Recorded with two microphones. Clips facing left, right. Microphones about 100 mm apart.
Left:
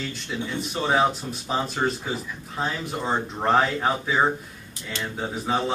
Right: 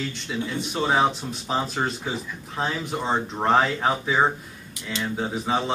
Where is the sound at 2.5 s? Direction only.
Centre (ahead or behind).